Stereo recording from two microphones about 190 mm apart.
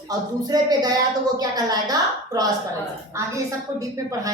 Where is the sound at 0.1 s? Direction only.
20° right (ahead or behind).